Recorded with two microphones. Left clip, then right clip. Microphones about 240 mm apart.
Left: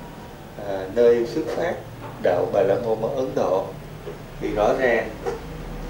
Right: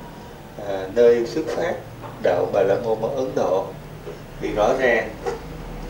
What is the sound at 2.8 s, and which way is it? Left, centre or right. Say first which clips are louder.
Speech: right 1 dB; right.